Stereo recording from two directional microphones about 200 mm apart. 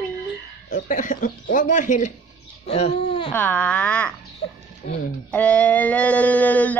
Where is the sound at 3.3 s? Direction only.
10° left (ahead or behind).